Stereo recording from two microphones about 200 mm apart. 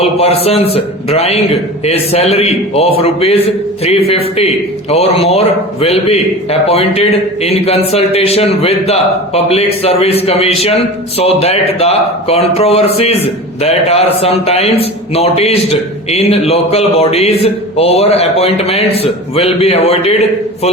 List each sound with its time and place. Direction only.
0.0 s a man's voice: 30° left (ahead or behind)